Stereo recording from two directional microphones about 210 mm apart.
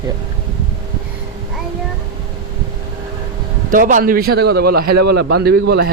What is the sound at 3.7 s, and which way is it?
A man's voice, 40° right (ahead or behind).